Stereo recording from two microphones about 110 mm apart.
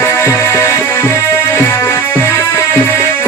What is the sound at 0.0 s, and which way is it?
Music, 20° left (ahead or behind).